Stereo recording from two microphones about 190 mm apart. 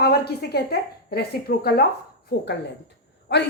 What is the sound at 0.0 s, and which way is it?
A woman's voice, 60° left (ahead or behind).